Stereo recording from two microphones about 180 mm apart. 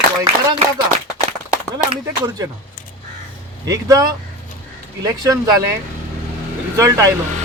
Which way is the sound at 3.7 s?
20° right (ahead or behind).